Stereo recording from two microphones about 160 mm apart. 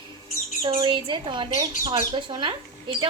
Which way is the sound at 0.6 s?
30° right (ahead or behind).